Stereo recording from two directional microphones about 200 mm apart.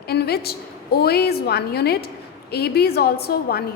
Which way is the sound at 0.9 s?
50° left (ahead or behind).